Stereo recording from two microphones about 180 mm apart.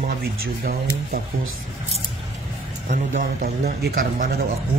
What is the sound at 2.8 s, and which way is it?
Speech, 50° right (ahead or behind).